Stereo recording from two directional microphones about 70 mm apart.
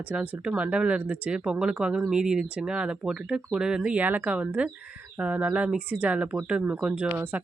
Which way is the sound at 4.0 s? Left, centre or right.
Right.